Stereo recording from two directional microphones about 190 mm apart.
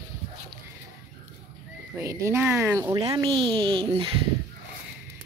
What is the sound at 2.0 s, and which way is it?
Speech, 15° right (ahead or behind).